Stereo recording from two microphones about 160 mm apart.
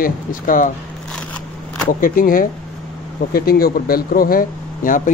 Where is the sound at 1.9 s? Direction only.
60° left (ahead or behind).